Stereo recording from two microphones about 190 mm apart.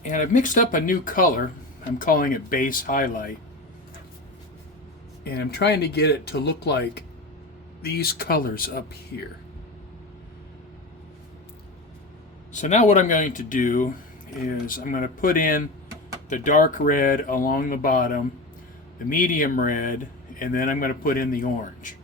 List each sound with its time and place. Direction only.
0.0 s speech: 40° left (ahead or behind)
5.2 s speech: 60° left (ahead or behind)
12.5 s speech: 40° left (ahead or behind)